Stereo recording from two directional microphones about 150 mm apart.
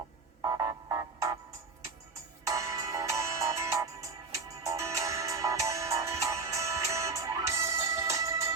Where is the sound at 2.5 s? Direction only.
20° right (ahead or behind).